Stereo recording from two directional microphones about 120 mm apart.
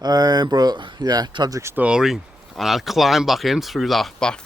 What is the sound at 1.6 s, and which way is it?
Speech, 20° right (ahead or behind).